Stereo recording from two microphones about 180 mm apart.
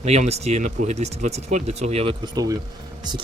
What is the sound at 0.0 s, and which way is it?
Speech, 35° right (ahead or behind).